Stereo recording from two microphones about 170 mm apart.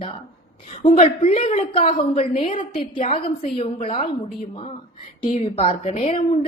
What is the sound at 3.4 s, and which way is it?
Speech, 35° left (ahead or behind).